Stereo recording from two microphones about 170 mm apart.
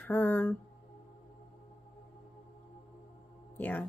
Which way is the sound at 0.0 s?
10° left (ahead or behind).